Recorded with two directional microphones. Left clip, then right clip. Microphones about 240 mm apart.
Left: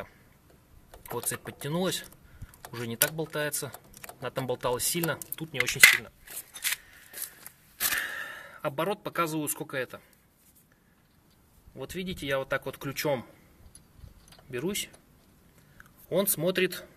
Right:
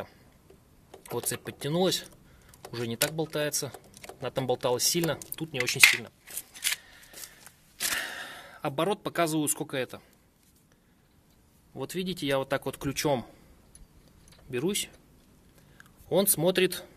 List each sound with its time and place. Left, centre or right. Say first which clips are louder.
1.1 s speech: right 1 dB; centre
5.7 s speech: left 2 dB; centre
6.6 s scissors: right 1 dB; centre
7.9 s speech: left 2 dB; centre
11.8 s speech: right 3 dB; right
14.5 s speech: right 2 dB; centre